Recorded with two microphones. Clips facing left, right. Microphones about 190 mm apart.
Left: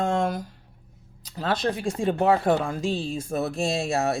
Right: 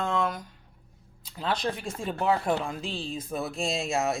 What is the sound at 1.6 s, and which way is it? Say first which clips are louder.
Speech: left 7 dB; 60° left (ahead or behind).